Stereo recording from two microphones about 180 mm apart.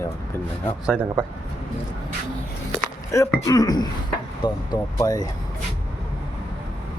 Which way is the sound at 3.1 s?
15° left (ahead or behind).